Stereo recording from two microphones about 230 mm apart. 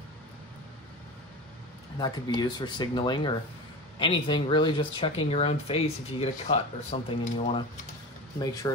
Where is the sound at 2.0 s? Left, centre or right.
Centre.